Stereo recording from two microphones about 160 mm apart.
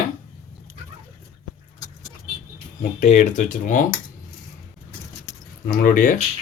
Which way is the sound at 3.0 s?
50° left (ahead or behind).